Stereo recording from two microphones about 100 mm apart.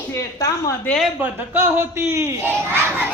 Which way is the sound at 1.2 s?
20° right (ahead or behind).